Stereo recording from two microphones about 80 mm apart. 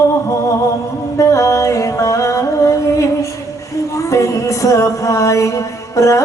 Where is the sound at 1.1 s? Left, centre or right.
Left.